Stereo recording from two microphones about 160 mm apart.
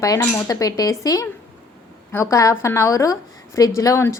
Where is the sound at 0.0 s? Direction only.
20° left (ahead or behind).